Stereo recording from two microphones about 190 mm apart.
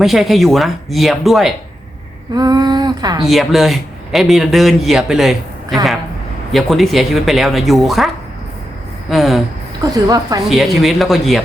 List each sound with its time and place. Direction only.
0.0 s a man's voice: centre (ahead or behind)
2.3 s speech: 20° right (ahead or behind)
3.2 s a man's voice: centre (ahead or behind)
6.5 s a man's voice: centre (ahead or behind)
9.9 s speech: 20° right (ahead or behind)
10.5 s a man's voice: centre (ahead or behind)